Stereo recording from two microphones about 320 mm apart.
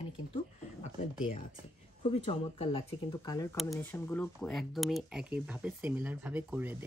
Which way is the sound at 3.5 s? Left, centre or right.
Centre.